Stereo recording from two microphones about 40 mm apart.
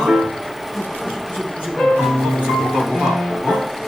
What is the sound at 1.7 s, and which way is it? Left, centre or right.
Music, centre.